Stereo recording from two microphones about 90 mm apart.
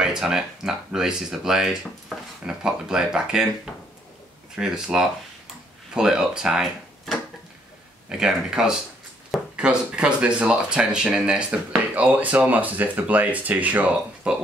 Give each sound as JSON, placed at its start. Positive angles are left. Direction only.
{"t": 0.0, "sound": "speech", "side_deg": -5}
{"t": 8.1, "sound": "speech", "side_deg": -5}